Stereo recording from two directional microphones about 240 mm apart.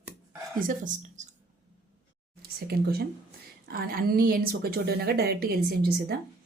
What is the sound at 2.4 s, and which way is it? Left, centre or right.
Speech, right.